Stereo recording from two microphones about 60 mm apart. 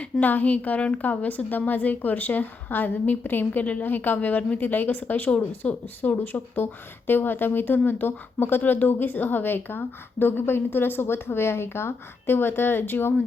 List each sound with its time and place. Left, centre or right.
0.0 s a woman's voice: left